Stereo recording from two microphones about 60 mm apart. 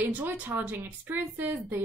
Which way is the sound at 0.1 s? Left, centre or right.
Right.